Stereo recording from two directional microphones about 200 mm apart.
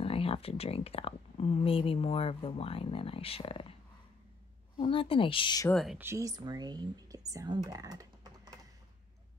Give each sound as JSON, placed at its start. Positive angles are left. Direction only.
{"t": 0.0, "sound": "speech", "side_deg": 30}
{"t": 4.7, "sound": "speech", "side_deg": 25}
{"t": 5.7, "sound": "speech", "side_deg": 0}
{"t": 5.9, "sound": "speech", "side_deg": -15}